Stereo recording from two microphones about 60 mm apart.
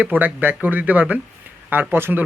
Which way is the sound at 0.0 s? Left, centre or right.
Right.